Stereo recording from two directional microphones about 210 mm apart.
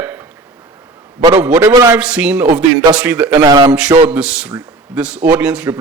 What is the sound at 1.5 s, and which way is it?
A man's voice, 15° right (ahead or behind).